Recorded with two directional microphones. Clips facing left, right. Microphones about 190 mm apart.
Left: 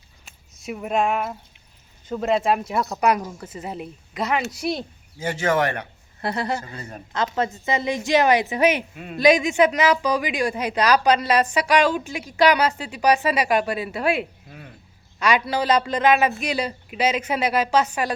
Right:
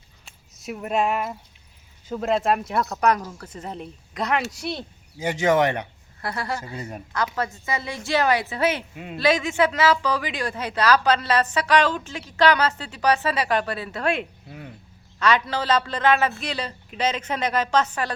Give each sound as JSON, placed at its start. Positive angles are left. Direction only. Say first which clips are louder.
{"t": 0.3, "sound": "speech", "louder": "left 1 dB", "side_deg": 0}
{"t": 5.2, "sound": "speech", "louder": "right 2 dB", "side_deg": -15}
{"t": 6.2, "sound": "speech", "louder": "left 4 dB", "side_deg": 20}
{"t": 6.7, "sound": "speech", "louder": "right 3 dB", "side_deg": -15}
{"t": 7.3, "sound": "speech", "louder": "left 4 dB", "side_deg": 20}